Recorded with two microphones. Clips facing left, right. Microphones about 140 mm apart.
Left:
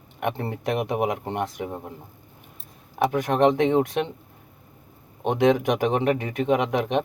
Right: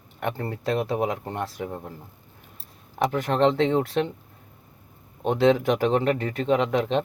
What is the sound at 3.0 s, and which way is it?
Speech, 15° left (ahead or behind).